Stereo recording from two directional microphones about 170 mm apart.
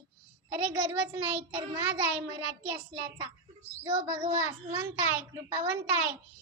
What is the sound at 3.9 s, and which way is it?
Speech, 40° right (ahead or behind).